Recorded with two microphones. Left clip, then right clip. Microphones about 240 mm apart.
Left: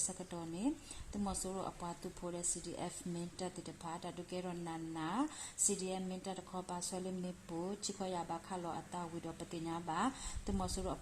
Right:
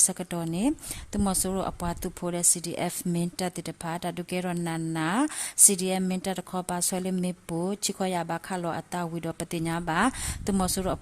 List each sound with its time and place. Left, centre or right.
0.2 s a woman's voice: right